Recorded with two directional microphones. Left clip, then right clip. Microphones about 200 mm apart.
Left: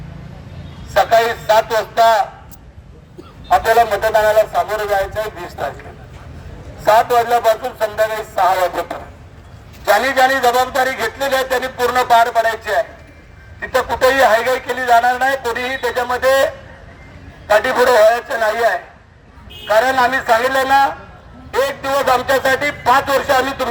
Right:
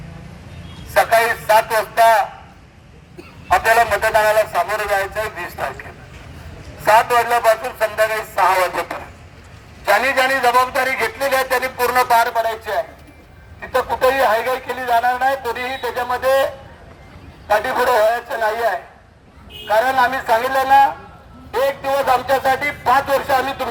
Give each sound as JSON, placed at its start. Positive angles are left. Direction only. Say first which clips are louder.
{"t": 0.9, "sound": "a man's voice", "louder": "left 1 dB", "side_deg": 45}
{"t": 3.7, "sound": "a man's voice", "louder": "even", "side_deg": 40}
{"t": 6.8, "sound": "a man's voice", "louder": "left 1 dB", "side_deg": 45}
{"t": 17.5, "sound": "a man's voice", "louder": "left 4 dB", "side_deg": 45}